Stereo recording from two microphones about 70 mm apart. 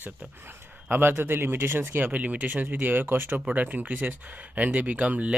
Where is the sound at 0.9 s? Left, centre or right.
Right.